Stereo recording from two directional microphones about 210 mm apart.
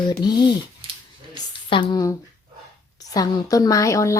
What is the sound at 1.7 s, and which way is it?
A woman's voice, 20° left (ahead or behind).